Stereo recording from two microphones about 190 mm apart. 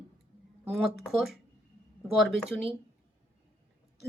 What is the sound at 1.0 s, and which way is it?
Speech, centre (ahead or behind).